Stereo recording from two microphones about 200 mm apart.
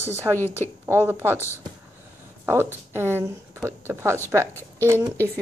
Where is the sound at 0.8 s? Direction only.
10° right (ahead or behind).